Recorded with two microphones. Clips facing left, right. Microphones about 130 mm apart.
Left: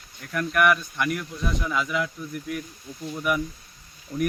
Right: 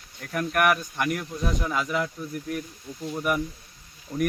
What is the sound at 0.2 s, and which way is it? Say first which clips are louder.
Speech: left 1 dB; 40° right (ahead or behind).